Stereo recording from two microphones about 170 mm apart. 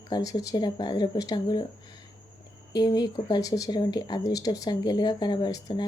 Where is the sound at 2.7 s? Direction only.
20° left (ahead or behind).